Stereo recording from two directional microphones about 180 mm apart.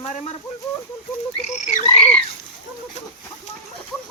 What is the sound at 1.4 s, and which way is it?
Frog, 40° left (ahead or behind).